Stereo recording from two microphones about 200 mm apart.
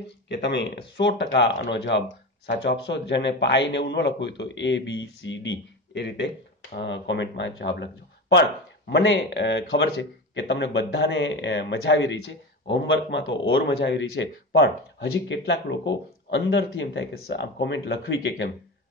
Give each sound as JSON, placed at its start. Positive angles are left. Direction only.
{"t": 0.3, "sound": "speech", "side_deg": 60}